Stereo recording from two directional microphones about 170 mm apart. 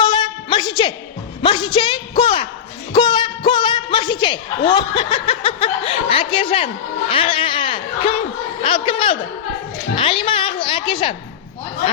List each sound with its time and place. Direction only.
0.0 s music: 25° left (ahead or behind)
1.4 s a sound: 25° left (ahead or behind)
2.9 s music: 25° left (ahead or behind)
4.7 s a woman's voice: 30° left (ahead or behind)